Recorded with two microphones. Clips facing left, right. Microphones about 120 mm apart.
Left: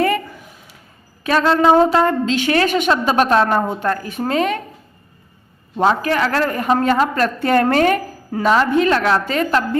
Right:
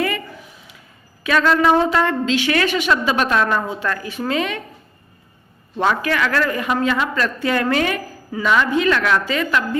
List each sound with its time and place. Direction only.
1.2 s a woman's voice: 35° left (ahead or behind)
5.7 s a woman's voice: 30° left (ahead or behind)